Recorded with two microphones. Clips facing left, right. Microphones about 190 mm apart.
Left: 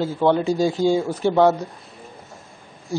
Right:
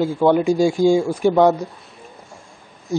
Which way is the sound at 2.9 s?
20° right (ahead or behind).